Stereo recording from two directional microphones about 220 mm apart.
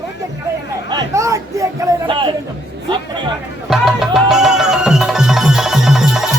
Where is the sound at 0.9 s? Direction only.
15° right (ahead or behind).